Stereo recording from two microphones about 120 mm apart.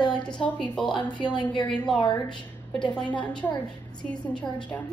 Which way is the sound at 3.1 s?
10° left (ahead or behind).